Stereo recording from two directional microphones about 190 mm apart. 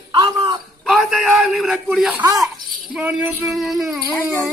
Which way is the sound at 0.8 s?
Centre (ahead or behind).